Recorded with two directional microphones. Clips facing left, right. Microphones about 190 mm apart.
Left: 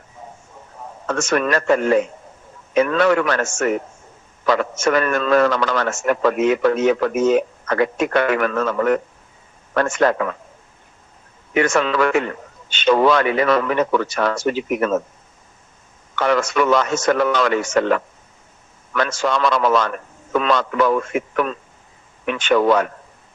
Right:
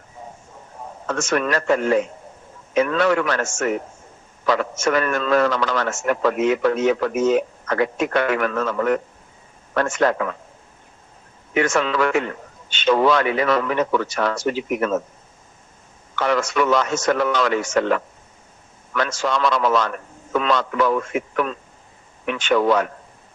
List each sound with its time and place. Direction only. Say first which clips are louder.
1.0 s a man's voice: left 2 dB; 60° left (ahead or behind)
11.5 s a man's voice: left 2 dB; 60° left (ahead or behind)
16.1 s a man's voice: left 2 dB; 60° left (ahead or behind)